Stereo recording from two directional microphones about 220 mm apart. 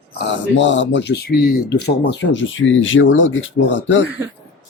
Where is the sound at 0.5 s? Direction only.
55° left (ahead or behind).